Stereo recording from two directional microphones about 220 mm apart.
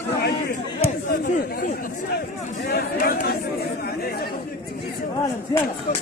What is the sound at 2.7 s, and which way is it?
Chatter, 45° left (ahead or behind).